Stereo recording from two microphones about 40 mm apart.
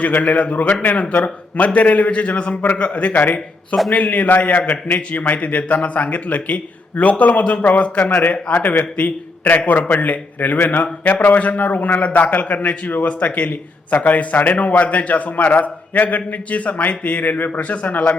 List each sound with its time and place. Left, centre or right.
0.0 s a man's voice: left